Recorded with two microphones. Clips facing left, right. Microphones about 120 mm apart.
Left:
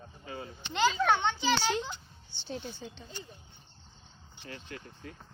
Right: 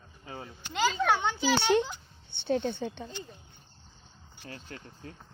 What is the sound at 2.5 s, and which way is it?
Speech, 65° right (ahead or behind).